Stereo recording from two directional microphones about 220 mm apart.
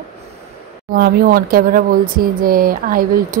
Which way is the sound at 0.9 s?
45° right (ahead or behind).